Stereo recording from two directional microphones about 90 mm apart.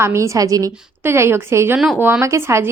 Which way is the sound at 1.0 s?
30° right (ahead or behind).